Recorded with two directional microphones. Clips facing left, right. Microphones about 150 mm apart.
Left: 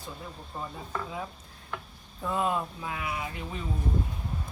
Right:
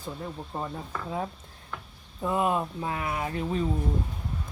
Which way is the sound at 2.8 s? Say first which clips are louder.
Right 4 dB; 40° right (ahead or behind).